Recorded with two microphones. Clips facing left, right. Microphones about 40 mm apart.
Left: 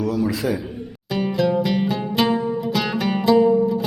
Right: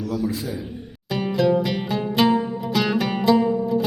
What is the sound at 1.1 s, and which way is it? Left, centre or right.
Music, centre.